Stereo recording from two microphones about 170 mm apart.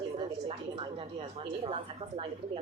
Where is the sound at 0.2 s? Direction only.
35° right (ahead or behind).